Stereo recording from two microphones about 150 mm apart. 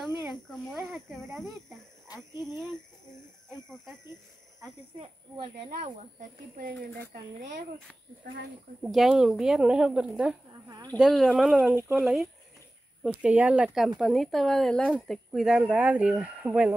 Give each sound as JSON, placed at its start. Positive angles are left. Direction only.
{"t": 0.7, "sound": "speech", "side_deg": 0}
{"t": 5.7, "sound": "speech", "side_deg": -55}
{"t": 8.8, "sound": "speech", "side_deg": -5}